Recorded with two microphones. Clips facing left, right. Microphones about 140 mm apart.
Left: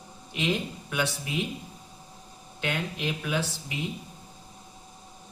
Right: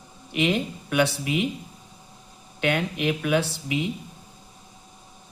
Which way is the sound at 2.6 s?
65° right (ahead or behind).